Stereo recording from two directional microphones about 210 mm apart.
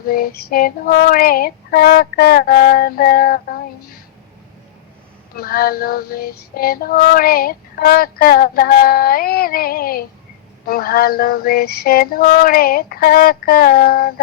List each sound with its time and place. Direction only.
0.1 s female singing: 45° left (ahead or behind)
5.4 s female singing: 45° left (ahead or behind)